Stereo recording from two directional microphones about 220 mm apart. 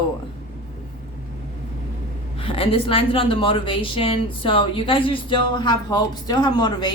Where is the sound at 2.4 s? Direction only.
25° left (ahead or behind).